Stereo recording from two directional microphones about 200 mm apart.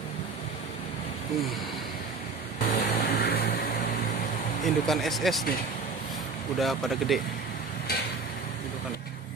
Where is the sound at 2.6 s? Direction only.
45° left (ahead or behind).